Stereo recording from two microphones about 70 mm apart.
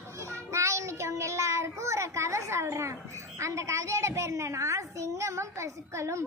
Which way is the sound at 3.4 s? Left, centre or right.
Right.